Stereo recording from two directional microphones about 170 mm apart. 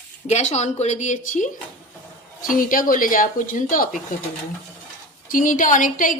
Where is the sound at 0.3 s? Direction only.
40° left (ahead or behind).